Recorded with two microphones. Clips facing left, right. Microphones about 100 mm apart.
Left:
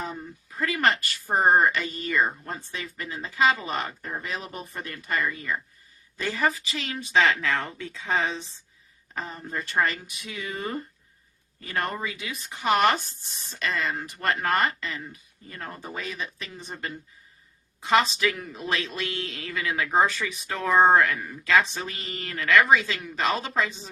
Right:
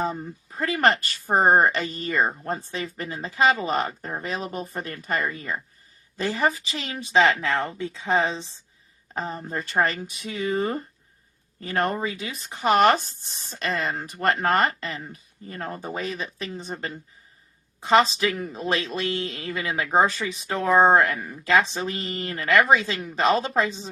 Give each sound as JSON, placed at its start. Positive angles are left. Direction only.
{"t": 0.0, "sound": "speech", "side_deg": -35}
{"t": 18.9, "sound": "speech", "side_deg": -20}